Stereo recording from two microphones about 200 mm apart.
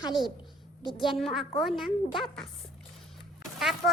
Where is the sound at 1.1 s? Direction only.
Centre (ahead or behind).